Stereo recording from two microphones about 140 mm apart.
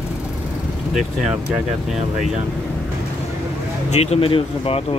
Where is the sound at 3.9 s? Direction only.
50° left (ahead or behind).